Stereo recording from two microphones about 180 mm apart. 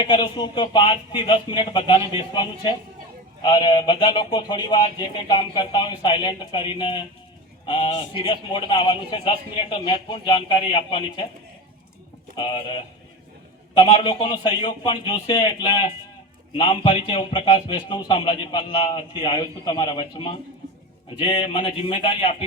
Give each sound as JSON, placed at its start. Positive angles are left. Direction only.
{"t": 0.0, "sound": "a man's voice", "side_deg": 25}
{"t": 12.4, "sound": "a man's voice", "side_deg": 25}